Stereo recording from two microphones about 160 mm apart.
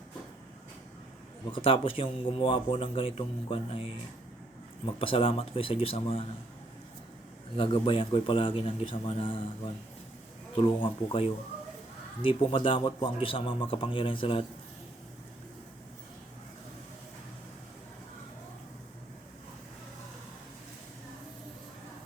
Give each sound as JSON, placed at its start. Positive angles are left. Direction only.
{"t": 1.5, "sound": "speech", "side_deg": 35}
{"t": 4.9, "sound": "speech", "side_deg": 35}
{"t": 7.5, "sound": "speech", "side_deg": 35}
{"t": 10.6, "sound": "speech", "side_deg": 30}